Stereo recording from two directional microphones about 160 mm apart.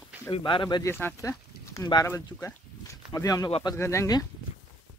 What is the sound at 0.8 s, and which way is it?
Speech, 15° left (ahead or behind).